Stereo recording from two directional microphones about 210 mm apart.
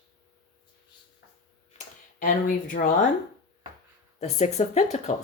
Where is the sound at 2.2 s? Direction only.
40° left (ahead or behind).